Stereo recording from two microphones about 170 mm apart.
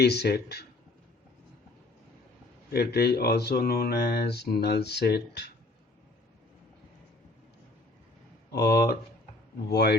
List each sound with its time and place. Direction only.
0.0 s speech: 75° left (ahead or behind)
2.7 s speech: 70° left (ahead or behind)
8.5 s speech: 70° left (ahead or behind)